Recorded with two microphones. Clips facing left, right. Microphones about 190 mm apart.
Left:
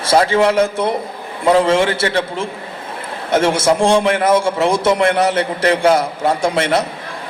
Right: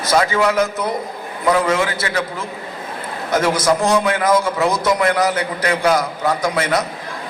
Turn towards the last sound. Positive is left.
turn(degrees=30)  # may be behind; listen again after turning